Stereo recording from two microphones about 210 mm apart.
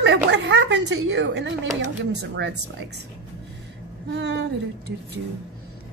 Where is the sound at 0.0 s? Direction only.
55° right (ahead or behind).